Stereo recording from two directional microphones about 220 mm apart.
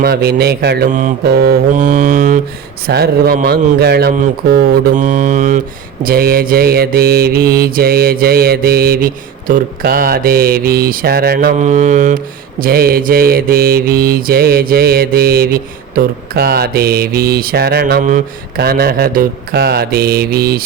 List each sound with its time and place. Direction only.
0.0 s mantra: 45° right (ahead or behind)